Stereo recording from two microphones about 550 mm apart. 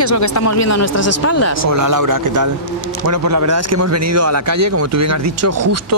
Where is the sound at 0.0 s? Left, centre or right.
Left.